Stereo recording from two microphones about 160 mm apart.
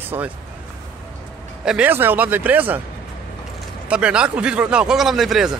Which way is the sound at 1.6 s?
10° right (ahead or behind).